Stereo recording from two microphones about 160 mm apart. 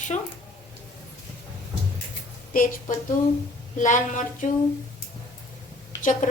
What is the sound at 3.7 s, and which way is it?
Speech, 50° left (ahead or behind).